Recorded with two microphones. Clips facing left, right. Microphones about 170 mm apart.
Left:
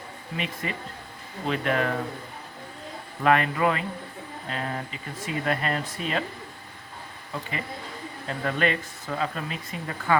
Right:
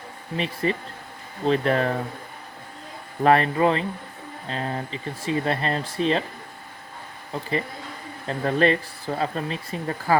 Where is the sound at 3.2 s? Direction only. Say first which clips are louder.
Right 4 dB; 35° right (ahead or behind).